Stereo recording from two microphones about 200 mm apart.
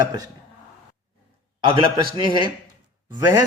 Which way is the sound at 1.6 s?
25° right (ahead or behind).